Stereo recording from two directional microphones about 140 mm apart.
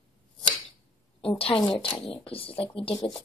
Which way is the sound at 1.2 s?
40° left (ahead or behind).